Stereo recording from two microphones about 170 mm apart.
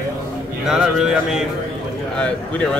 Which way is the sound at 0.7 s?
5° right (ahead or behind).